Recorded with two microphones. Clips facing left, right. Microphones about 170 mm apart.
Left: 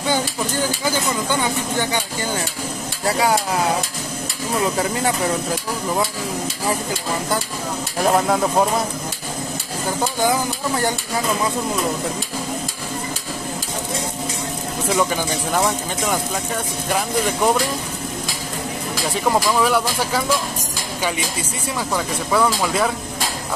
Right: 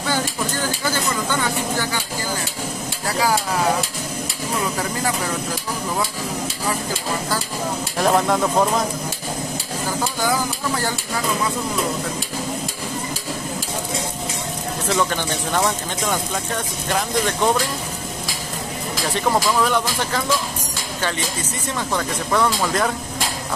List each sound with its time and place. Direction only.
0.0 s vehicle: 15° left (ahead or behind)
3.1 s stir: 25° left (ahead or behind)
8.0 s speech: 5° left (ahead or behind)
14.9 s speech: 10° left (ahead or behind)
19.0 s speech: 5° left (ahead or behind)
21.7 s speech: 5° left (ahead or behind)